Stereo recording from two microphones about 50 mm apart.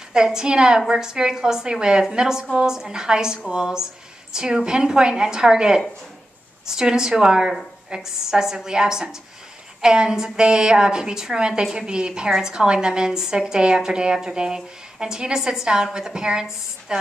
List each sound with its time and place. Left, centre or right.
0.1 s a woman's voice: centre